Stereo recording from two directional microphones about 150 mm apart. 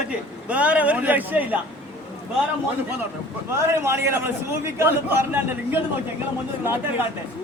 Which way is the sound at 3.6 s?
15° right (ahead or behind).